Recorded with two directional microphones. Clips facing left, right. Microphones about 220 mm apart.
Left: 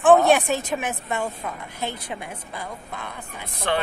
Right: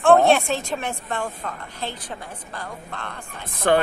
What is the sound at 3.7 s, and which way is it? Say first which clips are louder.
Speech: right 6 dB; 50° right (ahead or behind).